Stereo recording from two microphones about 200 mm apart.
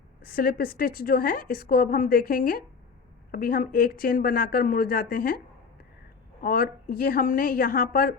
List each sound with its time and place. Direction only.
0.2 s a woman's voice: 50° left (ahead or behind)
6.4 s a woman's voice: 45° left (ahead or behind)